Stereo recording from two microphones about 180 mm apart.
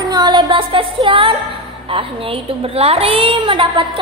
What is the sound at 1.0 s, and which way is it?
A woman's voice, 30° right (ahead or behind).